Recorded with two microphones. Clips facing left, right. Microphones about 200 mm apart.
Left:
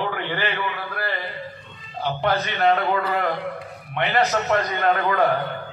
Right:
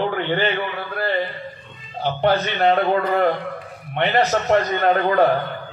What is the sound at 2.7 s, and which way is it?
Speech, 30° right (ahead or behind).